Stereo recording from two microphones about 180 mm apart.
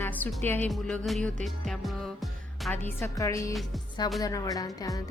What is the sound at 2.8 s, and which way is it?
Speech, 15° left (ahead or behind).